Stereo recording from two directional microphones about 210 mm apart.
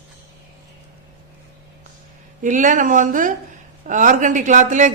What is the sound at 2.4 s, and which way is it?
Speech, 35° right (ahead or behind).